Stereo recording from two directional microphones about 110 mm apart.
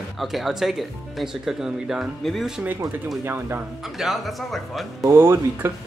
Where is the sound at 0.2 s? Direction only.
Centre (ahead or behind).